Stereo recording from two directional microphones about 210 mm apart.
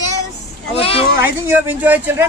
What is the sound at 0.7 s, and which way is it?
Speech, 25° left (ahead or behind).